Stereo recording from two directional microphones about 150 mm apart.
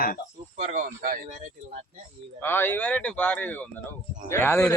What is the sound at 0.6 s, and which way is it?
Speech, 55° right (ahead or behind).